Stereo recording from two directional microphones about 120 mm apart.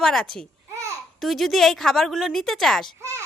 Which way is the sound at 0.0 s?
5° left (ahead or behind).